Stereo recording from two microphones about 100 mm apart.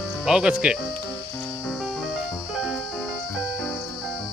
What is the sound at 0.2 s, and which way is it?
Speech, 10° right (ahead or behind).